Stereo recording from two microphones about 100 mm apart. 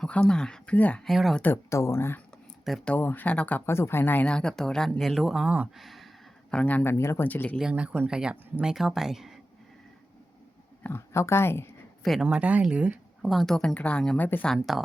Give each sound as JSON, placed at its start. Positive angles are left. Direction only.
{"t": 0.0, "sound": "speech", "side_deg": 10}
{"t": 1.0, "sound": "speech", "side_deg": 0}
{"t": 1.4, "sound": "speech", "side_deg": 25}
{"t": 6.5, "sound": "speech", "side_deg": 15}
{"t": 7.3, "sound": "speech", "side_deg": 15}
{"t": 7.6, "sound": "speech", "side_deg": -10}
{"t": 10.8, "sound": "speech", "side_deg": 25}
{"t": 12.0, "sound": "speech", "side_deg": -5}
{"t": 13.2, "sound": "speech", "side_deg": 5}
{"t": 14.4, "sound": "speech", "side_deg": 5}